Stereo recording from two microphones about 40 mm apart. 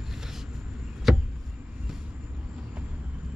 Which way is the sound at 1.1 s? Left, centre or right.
Centre.